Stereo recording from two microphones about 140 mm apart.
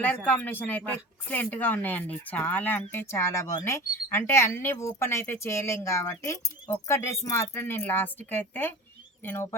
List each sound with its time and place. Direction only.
0.3 s speech: 15° left (ahead or behind)